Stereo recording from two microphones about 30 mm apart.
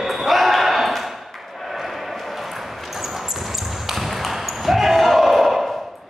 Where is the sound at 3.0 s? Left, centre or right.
Centre.